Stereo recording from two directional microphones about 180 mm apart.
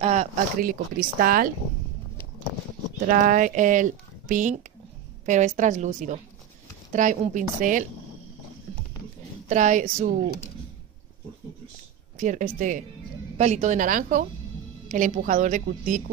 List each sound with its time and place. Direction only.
0.0 s speech: 40° right (ahead or behind)
3.1 s speech: 45° right (ahead or behind)
9.5 s speech: 45° right (ahead or behind)
12.2 s speech: 45° right (ahead or behind)